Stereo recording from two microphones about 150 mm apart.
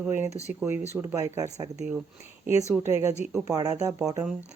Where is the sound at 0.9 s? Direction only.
20° right (ahead or behind).